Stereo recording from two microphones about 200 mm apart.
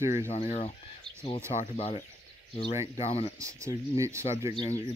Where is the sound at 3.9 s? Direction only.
15° right (ahead or behind).